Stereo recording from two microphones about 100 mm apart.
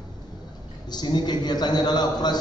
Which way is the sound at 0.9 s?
45° left (ahead or behind).